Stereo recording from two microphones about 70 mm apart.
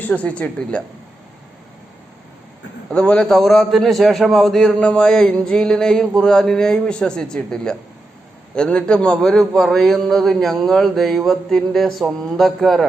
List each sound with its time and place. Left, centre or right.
0.0 s a woman's voice: left
2.9 s a man's voice: centre